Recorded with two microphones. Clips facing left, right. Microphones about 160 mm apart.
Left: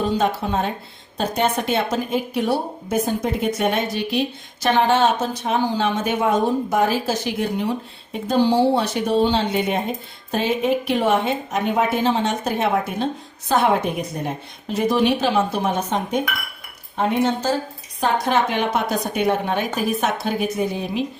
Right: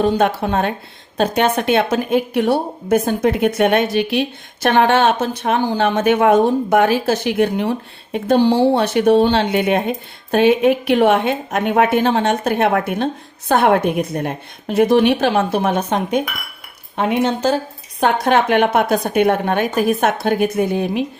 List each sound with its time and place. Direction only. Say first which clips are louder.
0.0 s a woman's voice: right 5 dB; 65° right (ahead or behind)
17.0 s a woman's voice: right 3 dB; 70° right (ahead or behind)